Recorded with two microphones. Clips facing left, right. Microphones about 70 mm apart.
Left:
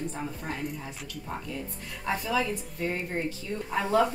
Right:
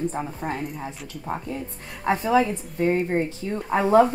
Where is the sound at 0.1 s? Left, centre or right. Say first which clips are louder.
Right 6 dB; right.